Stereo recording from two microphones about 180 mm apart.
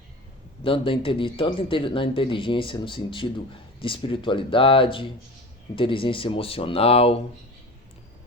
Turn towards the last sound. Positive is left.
turn(degrees=35)  # may be behind; listen again after turning